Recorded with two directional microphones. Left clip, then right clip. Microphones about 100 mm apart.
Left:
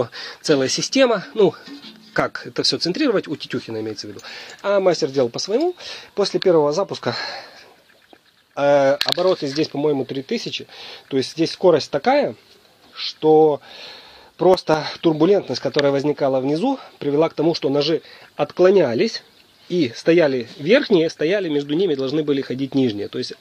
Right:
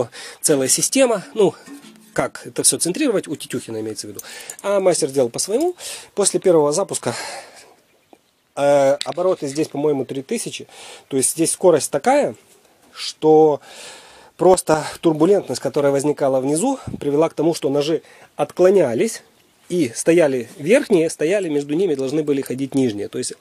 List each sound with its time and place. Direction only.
0.0 s speech: 25° right (ahead or behind)
8.5 s speech: 30° right (ahead or behind)
9.4 s speech: 20° right (ahead or behind)